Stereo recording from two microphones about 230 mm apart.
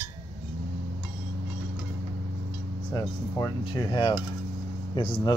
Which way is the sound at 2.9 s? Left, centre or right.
Centre.